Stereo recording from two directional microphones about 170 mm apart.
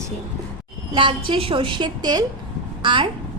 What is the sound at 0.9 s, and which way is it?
A woman's voice, 30° right (ahead or behind).